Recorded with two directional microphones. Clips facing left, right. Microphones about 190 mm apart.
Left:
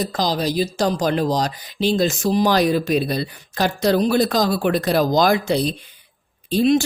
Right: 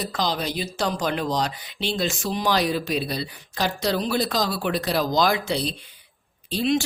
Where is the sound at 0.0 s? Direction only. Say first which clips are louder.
Left 5 dB; 40° left (ahead or behind).